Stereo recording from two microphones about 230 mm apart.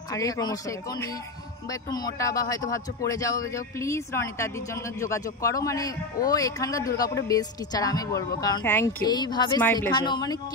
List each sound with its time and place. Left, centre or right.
0.1 s speech: centre
9.6 s speech: centre
10.0 s speech: centre